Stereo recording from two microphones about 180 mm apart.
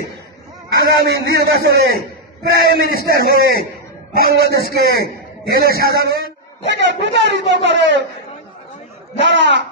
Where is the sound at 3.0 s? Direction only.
60° right (ahead or behind).